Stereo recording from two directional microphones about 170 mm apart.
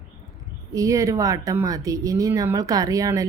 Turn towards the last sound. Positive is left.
turn(degrees=-20)  # may be behind; listen again after turning